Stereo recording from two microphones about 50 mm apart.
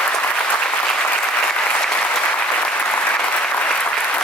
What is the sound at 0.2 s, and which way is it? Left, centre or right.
Applause, left.